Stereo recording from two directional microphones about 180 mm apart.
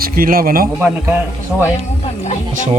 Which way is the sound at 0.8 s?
5° right (ahead or behind).